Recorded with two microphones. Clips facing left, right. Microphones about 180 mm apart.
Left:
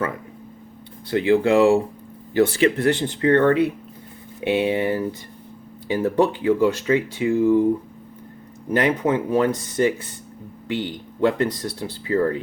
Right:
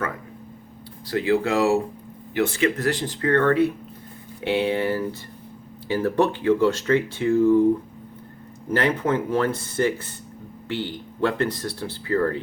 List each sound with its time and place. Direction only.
1.1 s speech: 25° left (ahead or behind)
8.7 s speech: 15° left (ahead or behind)